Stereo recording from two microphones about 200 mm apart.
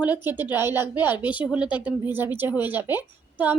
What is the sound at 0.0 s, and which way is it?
A woman's voice, 10° right (ahead or behind).